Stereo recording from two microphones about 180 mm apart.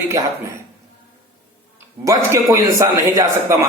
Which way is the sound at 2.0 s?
15° right (ahead or behind).